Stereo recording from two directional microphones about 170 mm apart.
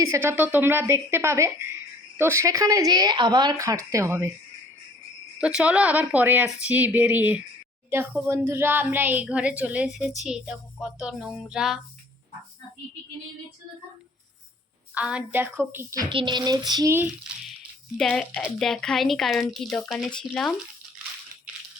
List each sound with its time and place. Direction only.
0.0 s a woman's voice: 15° right (ahead or behind)
5.4 s a woman's voice: 5° right (ahead or behind)
14.9 s a woman's voice: 10° right (ahead or behind)
17.9 s speech: 5° left (ahead or behind)